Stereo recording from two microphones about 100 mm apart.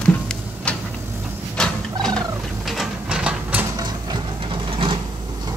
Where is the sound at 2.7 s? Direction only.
5° right (ahead or behind).